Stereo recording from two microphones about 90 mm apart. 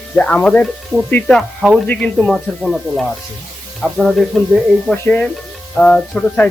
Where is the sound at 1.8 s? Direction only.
20° left (ahead or behind).